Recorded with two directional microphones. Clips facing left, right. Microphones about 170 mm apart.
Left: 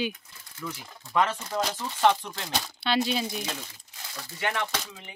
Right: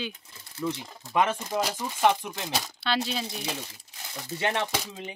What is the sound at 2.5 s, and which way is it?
Speech, centre (ahead or behind).